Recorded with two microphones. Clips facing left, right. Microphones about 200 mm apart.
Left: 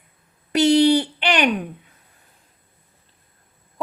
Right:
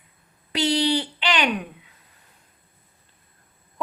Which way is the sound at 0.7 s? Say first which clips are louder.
Left 8 dB; 50° left (ahead or behind).